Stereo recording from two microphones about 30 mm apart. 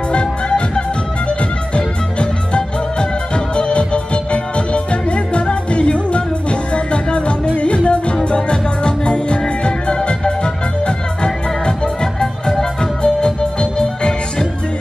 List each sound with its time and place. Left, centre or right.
0.1 s music: left